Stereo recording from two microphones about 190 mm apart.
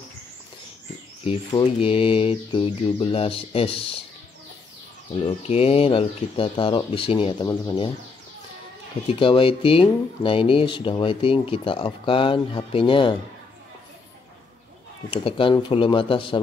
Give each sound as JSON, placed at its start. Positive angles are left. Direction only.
{"t": 1.5, "sound": "speech", "side_deg": 25}
{"t": 5.5, "sound": "speech", "side_deg": 30}
{"t": 9.1, "sound": "speech", "side_deg": 30}
{"t": 15.0, "sound": "speech", "side_deg": 30}